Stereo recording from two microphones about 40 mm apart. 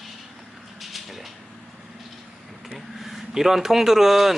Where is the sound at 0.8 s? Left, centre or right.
Centre.